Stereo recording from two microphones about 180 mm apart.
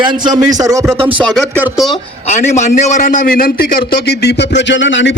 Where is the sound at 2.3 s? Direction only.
40° left (ahead or behind).